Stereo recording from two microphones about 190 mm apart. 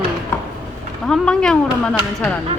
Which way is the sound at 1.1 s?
5° left (ahead or behind).